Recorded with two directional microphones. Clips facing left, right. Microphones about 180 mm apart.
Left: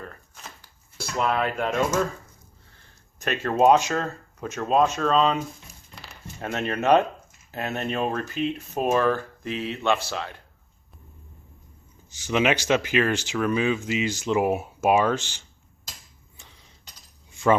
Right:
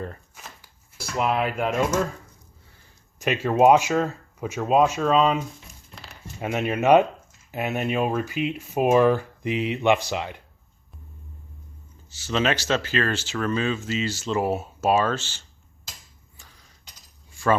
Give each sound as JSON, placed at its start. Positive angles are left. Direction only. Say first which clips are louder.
{"t": 0.3, "sound": "shuffling cards", "louder": "even", "side_deg": -10}
{"t": 3.2, "sound": "speech", "louder": "right 2 dB", "side_deg": -10}
{"t": 5.9, "sound": "a sound", "louder": "even", "side_deg": 0}
{"t": 6.4, "sound": "speech", "louder": "right 3 dB", "side_deg": -10}
{"t": 12.1, "sound": "speech", "louder": "left 1 dB", "side_deg": 15}
{"t": 16.4, "sound": "a sound", "louder": "left 1 dB", "side_deg": 20}